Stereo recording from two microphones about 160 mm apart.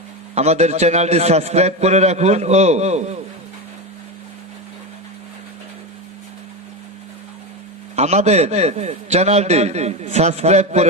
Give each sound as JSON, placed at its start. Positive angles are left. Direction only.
{"t": 0.3, "sound": "a man's voice", "side_deg": -45}
{"t": 7.9, "sound": "a man's voice", "side_deg": -45}